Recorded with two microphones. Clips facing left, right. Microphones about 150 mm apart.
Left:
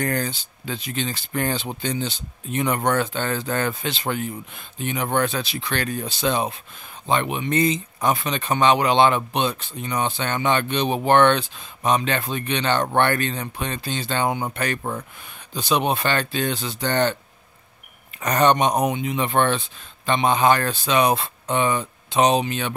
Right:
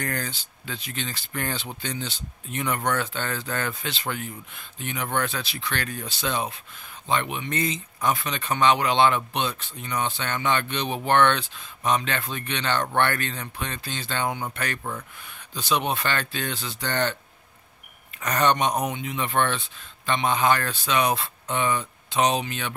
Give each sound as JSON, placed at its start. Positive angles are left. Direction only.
{"t": 0.0, "sound": "speech", "side_deg": 20}
{"t": 14.8, "sound": "speech", "side_deg": 35}
{"t": 15.5, "sound": "speech", "side_deg": 20}
{"t": 18.2, "sound": "speech", "side_deg": 20}